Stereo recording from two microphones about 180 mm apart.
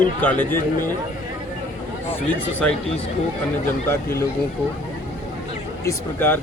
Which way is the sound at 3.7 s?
15° left (ahead or behind).